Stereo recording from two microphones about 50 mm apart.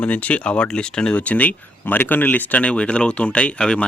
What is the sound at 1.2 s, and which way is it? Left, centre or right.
Speech, left.